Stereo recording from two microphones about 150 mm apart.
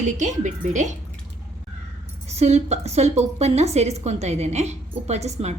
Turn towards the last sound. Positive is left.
turn(degrees=-45)  # may be behind; listen again after turning